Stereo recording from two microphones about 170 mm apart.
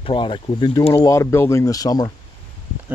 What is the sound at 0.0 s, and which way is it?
Speech, 30° left (ahead or behind).